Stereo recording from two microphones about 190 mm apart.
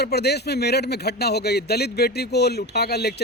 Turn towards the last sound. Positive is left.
turn(degrees=60)  # may be behind; listen again after turning